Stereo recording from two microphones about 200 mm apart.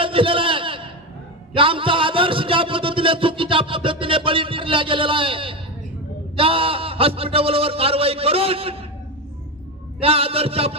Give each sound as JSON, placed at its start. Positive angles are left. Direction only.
{"t": 0.0, "sound": "a sound", "side_deg": -25}
{"t": 6.3, "sound": "a man's voice", "side_deg": -25}
{"t": 9.9, "sound": "a man's voice", "side_deg": -30}